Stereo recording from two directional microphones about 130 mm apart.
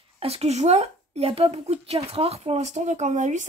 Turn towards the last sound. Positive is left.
turn(degrees=-70)  # may be behind; listen again after turning